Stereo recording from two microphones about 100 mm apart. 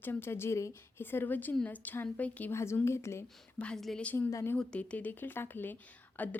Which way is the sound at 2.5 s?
25° left (ahead or behind).